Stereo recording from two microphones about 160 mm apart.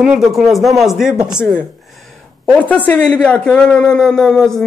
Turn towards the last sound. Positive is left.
turn(degrees=0)  # may be behind; listen again after turning